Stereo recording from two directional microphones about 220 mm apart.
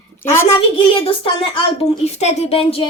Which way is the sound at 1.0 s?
25° left (ahead or behind).